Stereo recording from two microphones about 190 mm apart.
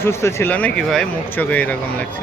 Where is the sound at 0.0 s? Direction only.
15° left (ahead or behind).